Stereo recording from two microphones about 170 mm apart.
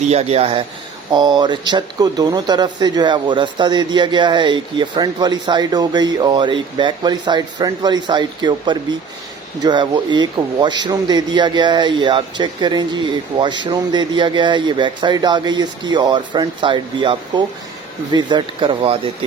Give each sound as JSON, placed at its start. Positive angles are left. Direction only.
{"t": 0.1, "sound": "speech", "side_deg": -40}